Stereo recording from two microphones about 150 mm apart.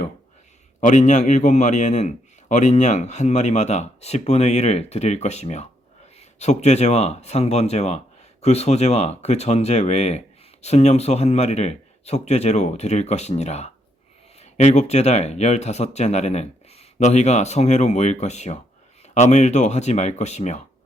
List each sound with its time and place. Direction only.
0.8 s speech: 55° left (ahead or behind)